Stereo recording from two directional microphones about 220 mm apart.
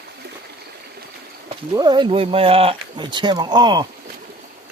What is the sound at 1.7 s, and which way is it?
Speech, 20° right (ahead or behind).